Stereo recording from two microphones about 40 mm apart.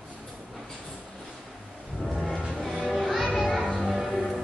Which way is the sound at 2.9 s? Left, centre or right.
Centre.